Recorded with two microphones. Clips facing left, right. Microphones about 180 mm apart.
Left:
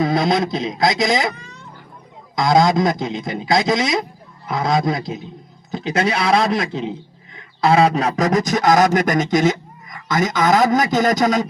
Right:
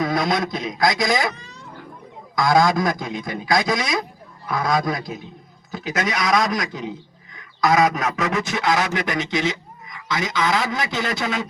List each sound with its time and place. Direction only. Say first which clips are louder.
0.0 s a man's voice: left 4 dB; 25° left (ahead or behind)
2.3 s a man's voice: left 2 dB; 20° left (ahead or behind); by 11.4 s 40° left (ahead or behind)